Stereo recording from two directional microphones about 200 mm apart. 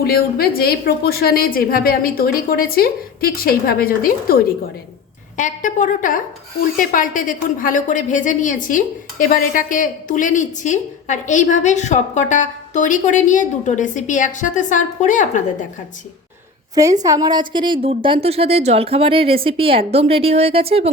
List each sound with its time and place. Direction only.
0.0 s a woman's voice: 50° left (ahead or behind)
17.0 s a woman's voice: 20° right (ahead or behind)